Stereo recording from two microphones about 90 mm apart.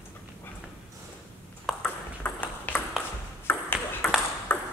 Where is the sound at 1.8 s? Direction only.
15° left (ahead or behind).